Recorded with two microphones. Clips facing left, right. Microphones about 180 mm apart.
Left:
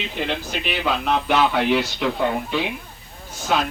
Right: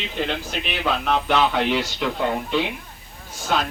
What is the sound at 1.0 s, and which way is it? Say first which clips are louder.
Speech: left 1 dB; 5° left (ahead or behind).